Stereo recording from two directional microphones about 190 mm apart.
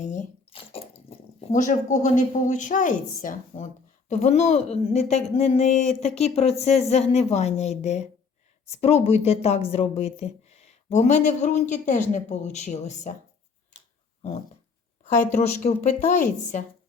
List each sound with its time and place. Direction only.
0.0 s a sound: 40° left (ahead or behind)
1.4 s speech: 35° left (ahead or behind)
15.3 s speech: 40° left (ahead or behind)